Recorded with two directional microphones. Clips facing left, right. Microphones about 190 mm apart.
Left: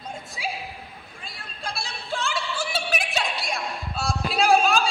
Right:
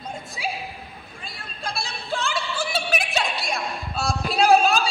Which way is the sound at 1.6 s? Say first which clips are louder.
Right 2 dB; 45° right (ahead or behind).